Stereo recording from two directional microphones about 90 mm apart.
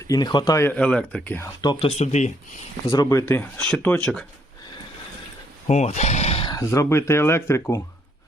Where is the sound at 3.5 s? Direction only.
10° left (ahead or behind).